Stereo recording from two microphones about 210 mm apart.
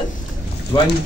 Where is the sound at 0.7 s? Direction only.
20° left (ahead or behind).